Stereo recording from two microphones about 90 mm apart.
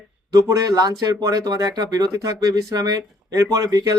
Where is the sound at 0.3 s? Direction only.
40° right (ahead or behind).